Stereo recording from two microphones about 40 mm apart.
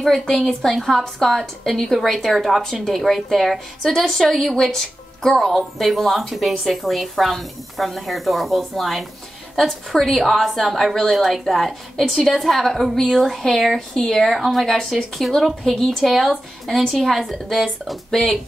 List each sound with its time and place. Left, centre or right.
0.2 s a woman's voice: centre
0.6 s speech: centre
2.6 s speech: centre
3.0 s speech: centre
10.1 s speech: centre